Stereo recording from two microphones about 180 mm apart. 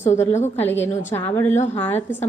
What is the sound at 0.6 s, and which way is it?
A woman's voice, 10° left (ahead or behind).